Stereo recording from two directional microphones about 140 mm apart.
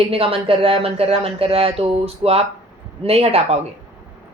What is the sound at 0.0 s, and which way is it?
A woman's voice, 40° right (ahead or behind).